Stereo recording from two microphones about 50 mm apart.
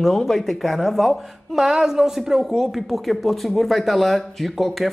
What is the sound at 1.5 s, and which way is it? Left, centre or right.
A man's voice, centre.